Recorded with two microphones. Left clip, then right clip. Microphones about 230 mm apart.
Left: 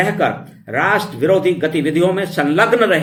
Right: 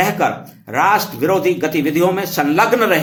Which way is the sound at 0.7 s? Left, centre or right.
Right.